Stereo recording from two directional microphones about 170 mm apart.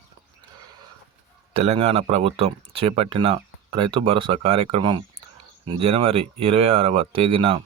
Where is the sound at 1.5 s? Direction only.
35° right (ahead or behind).